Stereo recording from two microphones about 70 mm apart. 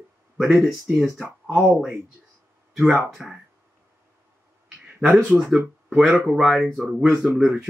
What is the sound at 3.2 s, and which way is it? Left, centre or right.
Speech, centre.